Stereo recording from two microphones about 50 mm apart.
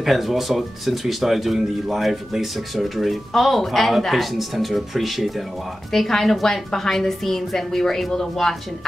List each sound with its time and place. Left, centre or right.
0.0 s a woman's voice: centre